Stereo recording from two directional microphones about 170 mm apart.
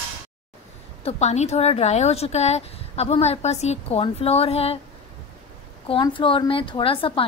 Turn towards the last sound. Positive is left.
turn(degrees=30)  # may be behind; listen again after turning